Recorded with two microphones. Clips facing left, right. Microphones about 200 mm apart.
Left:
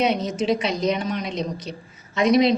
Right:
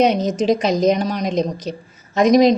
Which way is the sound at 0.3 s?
40° right (ahead or behind).